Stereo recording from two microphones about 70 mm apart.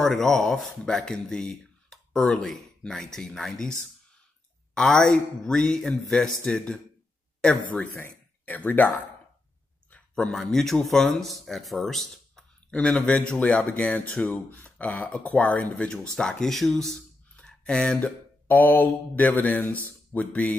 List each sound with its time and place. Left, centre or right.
0.0 s speech: centre
4.7 s speech: centre
8.5 s mantra: left
9.8 s speech: centre
12.7 s speech: centre
17.4 s a sound: centre
18.5 s mantra: left